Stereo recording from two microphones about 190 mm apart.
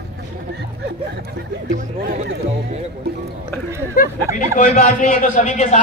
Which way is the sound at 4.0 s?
50° left (ahead or behind).